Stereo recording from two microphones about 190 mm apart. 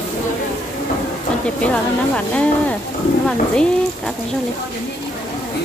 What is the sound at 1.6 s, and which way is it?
Speech, 5° left (ahead or behind).